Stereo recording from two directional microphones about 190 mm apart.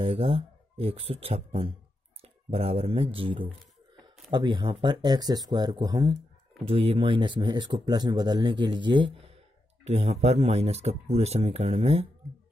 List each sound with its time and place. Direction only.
0.0 s speech: 30° right (ahead or behind)
6.7 s speech: 30° right (ahead or behind)